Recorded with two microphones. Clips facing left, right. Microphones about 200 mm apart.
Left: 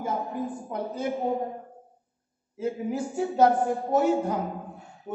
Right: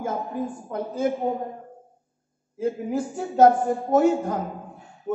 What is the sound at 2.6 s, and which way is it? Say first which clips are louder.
A man's voice: right 3 dB; 45° right (ahead or behind).